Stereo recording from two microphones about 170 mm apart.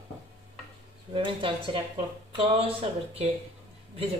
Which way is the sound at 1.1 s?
30° right (ahead or behind).